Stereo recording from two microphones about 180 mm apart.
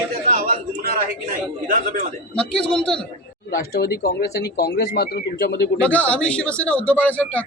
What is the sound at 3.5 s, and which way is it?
Speech, 55° left (ahead or behind).